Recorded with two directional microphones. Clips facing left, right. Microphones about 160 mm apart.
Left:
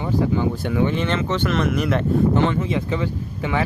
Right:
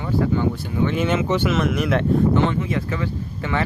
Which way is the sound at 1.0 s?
10° right (ahead or behind).